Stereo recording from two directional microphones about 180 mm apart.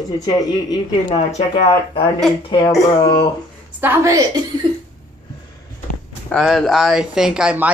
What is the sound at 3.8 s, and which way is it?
Speech, 15° right (ahead or behind).